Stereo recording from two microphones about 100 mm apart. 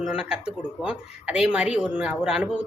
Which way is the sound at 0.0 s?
10° right (ahead or behind).